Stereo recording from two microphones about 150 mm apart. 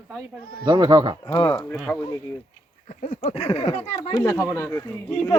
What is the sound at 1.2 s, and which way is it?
Speech, 25° left (ahead or behind).